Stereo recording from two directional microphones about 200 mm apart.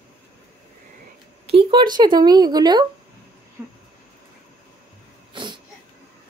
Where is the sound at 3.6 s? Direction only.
10° right (ahead or behind).